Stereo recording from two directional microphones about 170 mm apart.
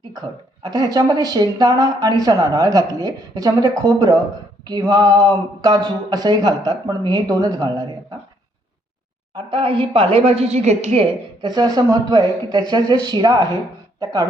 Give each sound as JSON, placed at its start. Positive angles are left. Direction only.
{"t": 0.1, "sound": "speech", "side_deg": -25}
{"t": 9.3, "sound": "speech", "side_deg": -30}
{"t": 11.4, "sound": "speech", "side_deg": -25}